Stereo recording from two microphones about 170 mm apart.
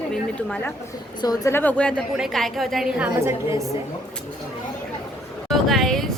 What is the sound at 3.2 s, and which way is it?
Speech, 15° right (ahead or behind).